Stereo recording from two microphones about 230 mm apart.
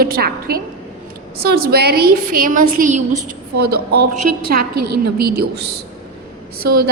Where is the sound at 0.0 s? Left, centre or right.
Right.